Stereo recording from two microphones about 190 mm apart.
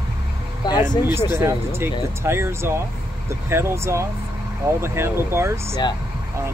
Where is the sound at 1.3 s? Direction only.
15° right (ahead or behind).